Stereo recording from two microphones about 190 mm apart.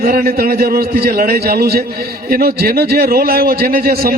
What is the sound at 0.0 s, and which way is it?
A man's voice, 50° right (ahead or behind).